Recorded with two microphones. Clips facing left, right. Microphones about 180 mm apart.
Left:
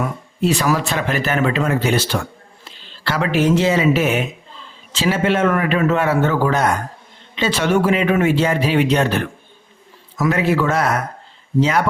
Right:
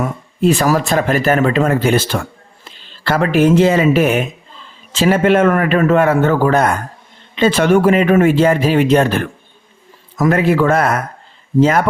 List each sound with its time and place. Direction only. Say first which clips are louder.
0.4 s a man's voice: right 4 dB; 45° right (ahead or behind)